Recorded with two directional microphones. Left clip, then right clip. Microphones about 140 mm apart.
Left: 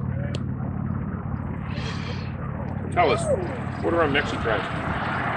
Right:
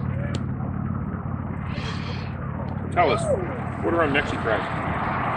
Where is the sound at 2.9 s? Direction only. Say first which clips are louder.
Even; 5° left (ahead or behind).